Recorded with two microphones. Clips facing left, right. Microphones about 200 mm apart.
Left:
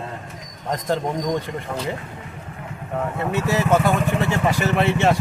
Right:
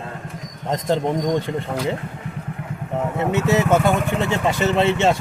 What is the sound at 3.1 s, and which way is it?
Speech, 20° right (ahead or behind).